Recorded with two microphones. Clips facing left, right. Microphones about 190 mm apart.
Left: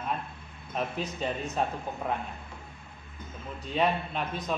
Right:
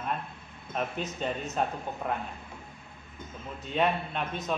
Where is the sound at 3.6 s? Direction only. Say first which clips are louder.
Even; centre (ahead or behind).